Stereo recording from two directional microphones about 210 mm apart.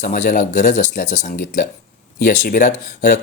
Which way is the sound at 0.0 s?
40° left (ahead or behind).